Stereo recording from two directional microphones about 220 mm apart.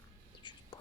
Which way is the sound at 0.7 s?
20° left (ahead or behind).